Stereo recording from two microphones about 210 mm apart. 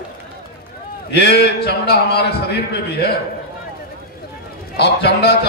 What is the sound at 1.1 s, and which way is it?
A man's voice, 50° left (ahead or behind).